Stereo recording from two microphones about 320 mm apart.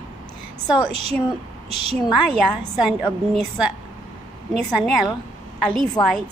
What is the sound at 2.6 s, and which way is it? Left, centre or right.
Speech, centre.